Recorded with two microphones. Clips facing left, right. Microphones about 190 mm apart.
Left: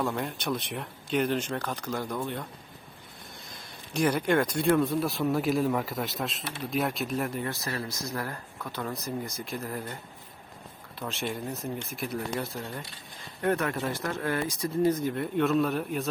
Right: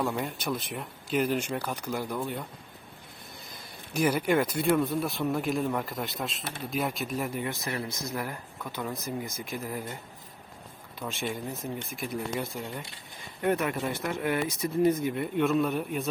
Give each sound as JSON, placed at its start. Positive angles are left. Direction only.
{"t": 0.0, "sound": "speech", "side_deg": -5}
{"t": 3.9, "sound": "speech", "side_deg": -5}
{"t": 7.5, "sound": "speech", "side_deg": -20}
{"t": 8.8, "sound": "speech", "side_deg": 0}
{"t": 11.2, "sound": "speech", "side_deg": 0}
{"t": 13.4, "sound": "speech", "side_deg": -15}
{"t": 15.0, "sound": "speech", "side_deg": -5}